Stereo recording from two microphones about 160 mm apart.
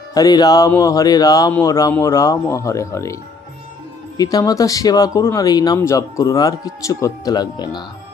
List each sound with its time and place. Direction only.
0.1 s speech: 25° left (ahead or behind)
4.2 s speech: 25° left (ahead or behind)